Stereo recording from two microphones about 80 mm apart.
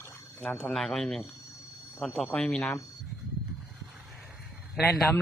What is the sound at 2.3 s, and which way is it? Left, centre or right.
Speech, centre.